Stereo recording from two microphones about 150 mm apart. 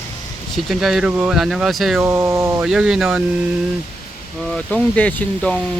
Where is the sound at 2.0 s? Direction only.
20° right (ahead or behind).